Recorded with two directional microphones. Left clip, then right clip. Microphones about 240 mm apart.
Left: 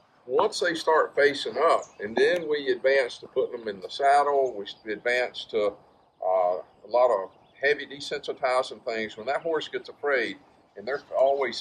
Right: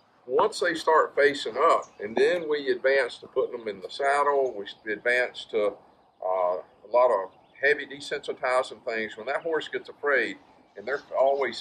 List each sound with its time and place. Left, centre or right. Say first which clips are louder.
0.3 s speech: even; centre